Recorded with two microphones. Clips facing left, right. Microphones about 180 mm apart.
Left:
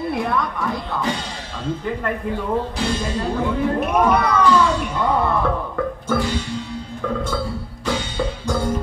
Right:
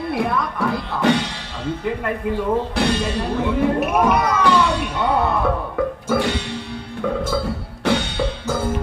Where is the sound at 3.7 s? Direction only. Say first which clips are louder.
Even; 10° right (ahead or behind).